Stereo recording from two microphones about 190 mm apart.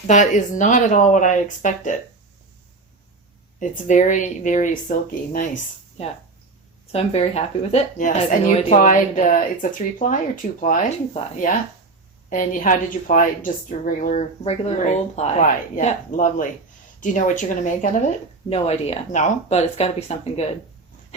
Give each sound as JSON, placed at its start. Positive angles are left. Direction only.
{"t": 0.1, "sound": "a woman's voice", "side_deg": 40}
{"t": 3.6, "sound": "a woman's voice", "side_deg": 40}
{"t": 6.9, "sound": "a woman's voice", "side_deg": 35}
{"t": 18.4, "sound": "a woman's voice", "side_deg": 30}